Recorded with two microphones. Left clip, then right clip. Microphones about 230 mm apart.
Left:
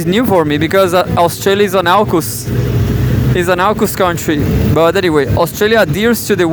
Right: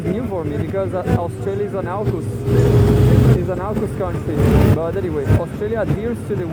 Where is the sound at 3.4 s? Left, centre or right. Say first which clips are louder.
Left 11 dB; left.